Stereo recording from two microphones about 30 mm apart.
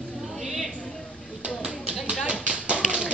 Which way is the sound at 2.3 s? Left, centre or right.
Right.